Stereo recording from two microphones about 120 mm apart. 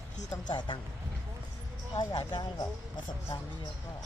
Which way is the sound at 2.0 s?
35° left (ahead or behind).